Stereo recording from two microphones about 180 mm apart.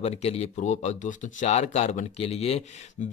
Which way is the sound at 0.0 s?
35° left (ahead or behind).